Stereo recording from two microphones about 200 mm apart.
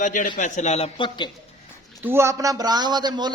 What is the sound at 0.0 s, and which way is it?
A man's voice, 40° left (ahead or behind).